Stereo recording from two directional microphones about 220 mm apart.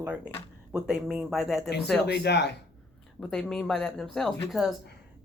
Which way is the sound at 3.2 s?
5° left (ahead or behind).